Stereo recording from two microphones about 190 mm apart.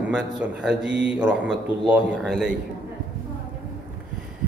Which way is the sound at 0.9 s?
70° right (ahead or behind).